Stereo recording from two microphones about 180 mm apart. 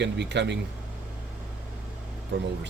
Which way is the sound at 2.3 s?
85° right.